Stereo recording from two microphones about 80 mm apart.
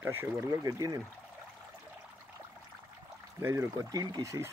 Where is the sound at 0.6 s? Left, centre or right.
Right.